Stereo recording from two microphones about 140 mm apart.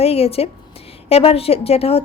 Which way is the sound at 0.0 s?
45° left (ahead or behind).